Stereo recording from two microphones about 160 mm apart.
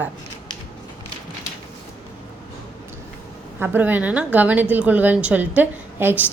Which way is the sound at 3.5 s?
10° right (ahead or behind).